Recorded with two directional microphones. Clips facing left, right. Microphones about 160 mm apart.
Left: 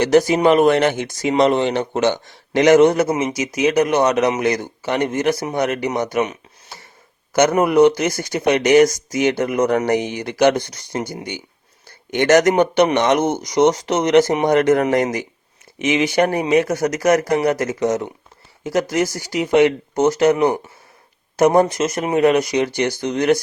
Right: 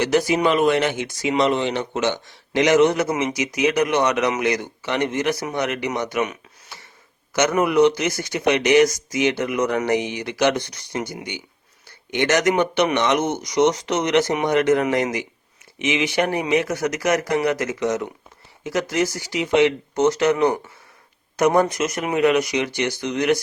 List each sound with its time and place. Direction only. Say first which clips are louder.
0.0 s speech: left 5 dB; 45° left (ahead or behind)
20.0 s speech: left 3 dB; 30° left (ahead or behind)